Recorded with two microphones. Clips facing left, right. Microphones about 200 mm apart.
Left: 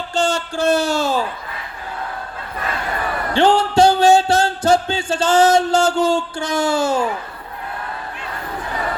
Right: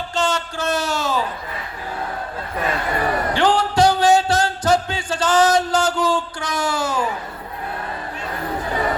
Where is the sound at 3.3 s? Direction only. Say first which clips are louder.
Left 6 dB; 25° left (ahead or behind).